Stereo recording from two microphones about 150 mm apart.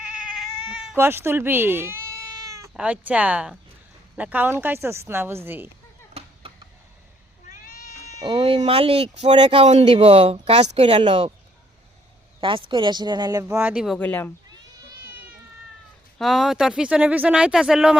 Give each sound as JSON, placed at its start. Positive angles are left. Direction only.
{"t": 0.2, "sound": "cat", "side_deg": -5}
{"t": 0.9, "sound": "a woman's voice", "side_deg": -15}
{"t": 2.5, "sound": "cat", "side_deg": -20}
{"t": 2.7, "sound": "a woman's voice", "side_deg": -10}
{"t": 7.5, "sound": "cat", "side_deg": 70}
{"t": 8.2, "sound": "speech", "side_deg": -35}
{"t": 12.4, "sound": "speech", "side_deg": -35}
{"t": 13.5, "sound": "a woman's voice", "side_deg": -15}
{"t": 13.8, "sound": "speech", "side_deg": 5}
{"t": 16.1, "sound": "speech", "side_deg": 0}